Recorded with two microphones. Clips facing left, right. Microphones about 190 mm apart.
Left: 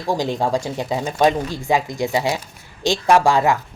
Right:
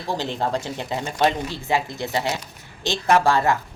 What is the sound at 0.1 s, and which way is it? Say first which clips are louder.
Speech: left 5 dB; 15° left (ahead or behind).